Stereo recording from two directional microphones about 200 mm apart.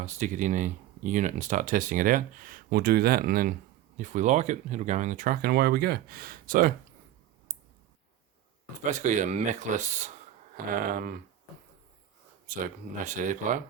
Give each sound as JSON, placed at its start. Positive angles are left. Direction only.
{"t": 0.0, "sound": "speech", "side_deg": -35}
{"t": 8.9, "sound": "speech", "side_deg": -35}
{"t": 12.5, "sound": "speech", "side_deg": -40}